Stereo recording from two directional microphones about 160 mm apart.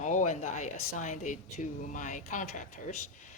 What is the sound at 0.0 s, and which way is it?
Speech, 50° left (ahead or behind).